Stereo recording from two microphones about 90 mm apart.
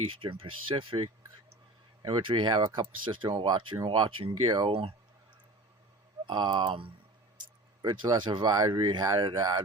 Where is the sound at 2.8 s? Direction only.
70° right (ahead or behind).